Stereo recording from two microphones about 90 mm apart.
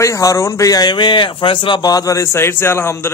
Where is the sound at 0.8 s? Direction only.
60° left (ahead or behind).